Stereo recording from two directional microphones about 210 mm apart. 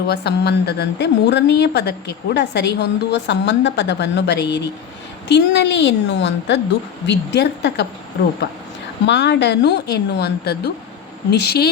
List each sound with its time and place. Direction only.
0.1 s a woman's voice: 50° left (ahead or behind)
9.0 s speech: 55° left (ahead or behind)